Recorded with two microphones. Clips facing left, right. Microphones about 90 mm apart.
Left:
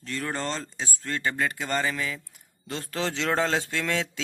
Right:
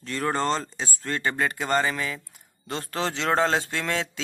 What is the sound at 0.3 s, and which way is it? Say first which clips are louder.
Speech: right 7 dB; 40° right (ahead or behind).